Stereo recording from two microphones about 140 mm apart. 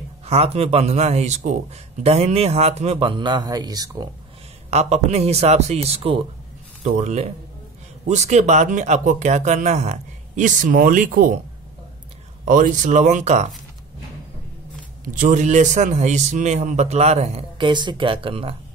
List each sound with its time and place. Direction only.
0.2 s a man's voice: 45° right (ahead or behind); by 4.1 s 25° right (ahead or behind)
4.6 s a man's voice: 50° right (ahead or behind)
6.8 s a man's voice: 55° right (ahead or behind); by 11.3 s 75° right (ahead or behind)
12.4 s speech: 65° right (ahead or behind)
15.0 s speech: 65° right (ahead or behind); by 17.5 s 50° right (ahead or behind)
17.6 s speech: 35° right (ahead or behind)